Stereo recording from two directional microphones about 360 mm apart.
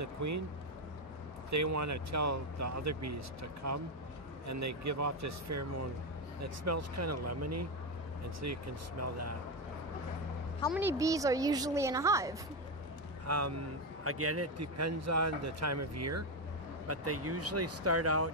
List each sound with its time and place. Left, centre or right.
0.0 s a man's voice: right
1.5 s a man's voice: right
10.7 s a woman's voice: centre
13.3 s a man's voice: right